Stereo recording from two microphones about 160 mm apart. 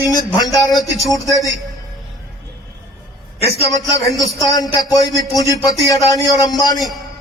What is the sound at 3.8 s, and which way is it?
Speech, 20° left (ahead or behind).